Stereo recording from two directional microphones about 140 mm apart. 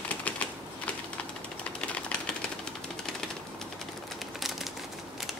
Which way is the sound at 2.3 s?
5° left (ahead or behind).